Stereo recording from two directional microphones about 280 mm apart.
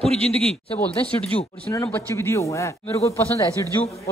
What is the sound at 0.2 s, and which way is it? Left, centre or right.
Speech, right.